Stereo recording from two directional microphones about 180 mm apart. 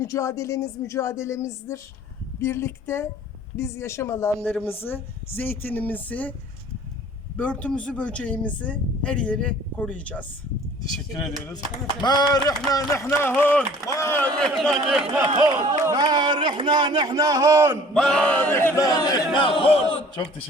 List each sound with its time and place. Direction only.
0.0 s speech: 15° left (ahead or behind)
7.3 s speech: 5° left (ahead or behind)
11.4 s a sound: 20° left (ahead or behind)
12.5 s speech: 20° left (ahead or behind); by 15.3 s 5° right (ahead or behind)
15.8 s a man's voice: 20° right (ahead or behind)
17.9 s a sound: 5° left (ahead or behind); by 20.1 s 30° left (ahead or behind)